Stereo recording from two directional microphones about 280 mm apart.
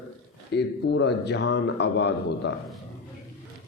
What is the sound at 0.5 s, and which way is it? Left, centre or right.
Speech, left.